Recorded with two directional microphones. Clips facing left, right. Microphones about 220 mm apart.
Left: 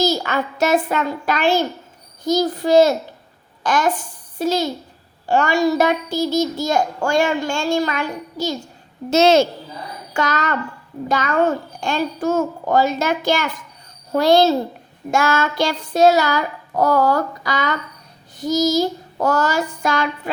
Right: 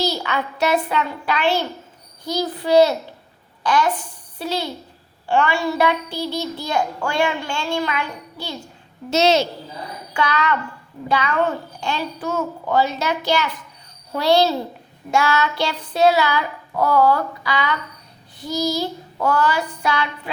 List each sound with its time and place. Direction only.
0.0 s a child's voice: 45° left (ahead or behind)